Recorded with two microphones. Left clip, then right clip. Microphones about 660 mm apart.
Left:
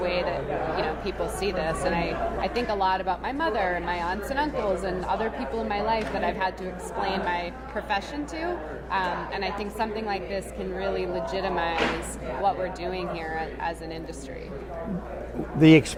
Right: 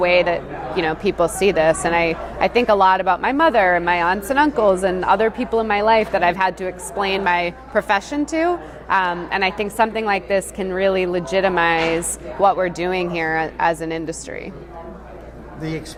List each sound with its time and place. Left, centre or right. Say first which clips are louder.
0.0 s a woman's voice: right 11 dB; right